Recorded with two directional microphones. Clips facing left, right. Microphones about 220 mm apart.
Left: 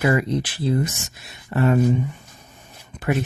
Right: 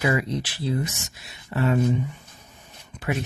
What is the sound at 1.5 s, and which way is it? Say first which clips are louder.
Speech: left 4 dB; 50° left (ahead or behind).